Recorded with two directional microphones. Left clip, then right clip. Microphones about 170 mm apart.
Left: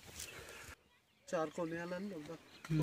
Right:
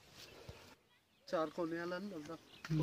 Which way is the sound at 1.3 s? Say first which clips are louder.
Even; 35° left (ahead or behind).